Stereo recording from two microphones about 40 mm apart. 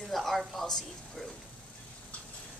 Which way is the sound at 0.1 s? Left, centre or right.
Centre.